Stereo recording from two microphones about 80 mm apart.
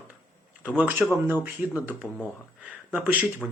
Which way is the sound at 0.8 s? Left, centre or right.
Right.